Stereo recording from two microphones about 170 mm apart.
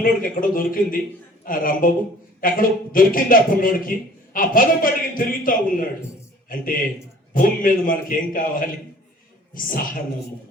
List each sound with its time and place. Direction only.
0.0 s a man's voice: 55° left (ahead or behind)
7.3 s a man's voice: 55° left (ahead or behind)